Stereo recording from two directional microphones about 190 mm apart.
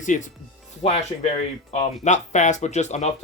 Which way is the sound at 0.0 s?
40° left (ahead or behind).